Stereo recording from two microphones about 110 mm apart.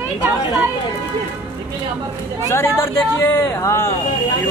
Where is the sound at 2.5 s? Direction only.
20° left (ahead or behind).